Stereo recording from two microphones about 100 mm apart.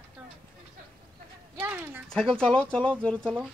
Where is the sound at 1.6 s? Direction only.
20° right (ahead or behind).